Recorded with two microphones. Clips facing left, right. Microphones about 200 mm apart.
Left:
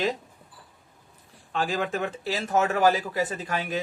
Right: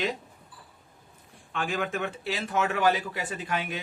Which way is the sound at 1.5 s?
35° left (ahead or behind).